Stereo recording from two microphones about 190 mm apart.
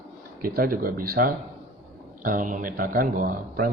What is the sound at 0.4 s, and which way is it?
A man's voice, 50° right (ahead or behind).